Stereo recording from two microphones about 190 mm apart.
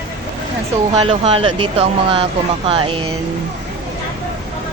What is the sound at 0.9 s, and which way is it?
Speech, 35° right (ahead or behind).